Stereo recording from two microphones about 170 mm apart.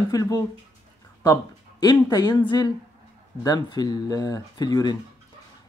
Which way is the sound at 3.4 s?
25° left (ahead or behind).